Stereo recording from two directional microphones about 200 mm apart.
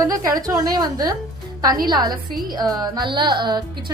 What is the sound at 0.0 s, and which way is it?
A woman's voice, 15° right (ahead or behind).